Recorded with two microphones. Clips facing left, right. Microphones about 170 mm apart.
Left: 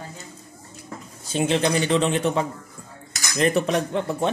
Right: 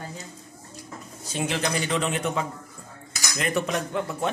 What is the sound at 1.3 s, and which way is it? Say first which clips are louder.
A man's voice: left 6 dB; 25° left (ahead or behind).